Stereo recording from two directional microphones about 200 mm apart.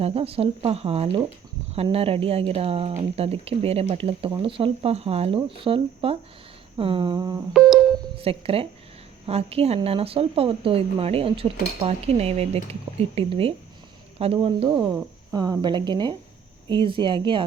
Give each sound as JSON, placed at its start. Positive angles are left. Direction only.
{"t": 0.0, "sound": "speech", "side_deg": -30}
{"t": 7.5, "sound": "music", "side_deg": 0}
{"t": 8.1, "sound": "speech", "side_deg": -30}
{"t": 11.9, "sound": "dishes", "side_deg": -30}
{"t": 13.0, "sound": "speech", "side_deg": -30}